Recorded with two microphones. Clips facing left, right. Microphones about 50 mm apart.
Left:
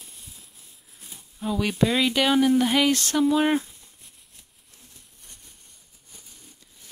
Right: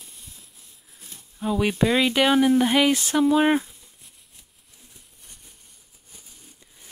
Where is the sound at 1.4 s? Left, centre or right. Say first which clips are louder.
Right 2 dB; centre.